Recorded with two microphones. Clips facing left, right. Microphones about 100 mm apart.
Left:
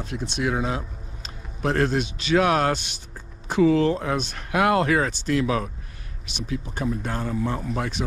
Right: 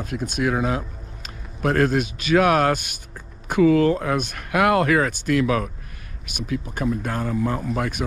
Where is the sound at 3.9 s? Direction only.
55° right (ahead or behind).